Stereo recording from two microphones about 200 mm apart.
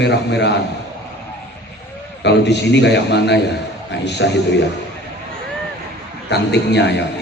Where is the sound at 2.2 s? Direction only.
60° left (ahead or behind).